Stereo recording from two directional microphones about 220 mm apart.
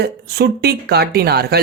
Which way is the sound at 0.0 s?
45° right (ahead or behind).